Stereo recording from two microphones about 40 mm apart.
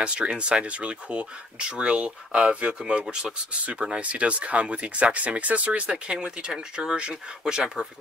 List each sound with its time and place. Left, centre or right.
0.0 s speech: right
3.9 s speech: right
5.7 s speech: right